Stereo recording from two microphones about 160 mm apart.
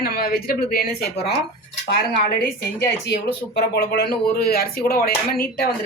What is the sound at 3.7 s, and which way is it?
A woman's voice, 80° left.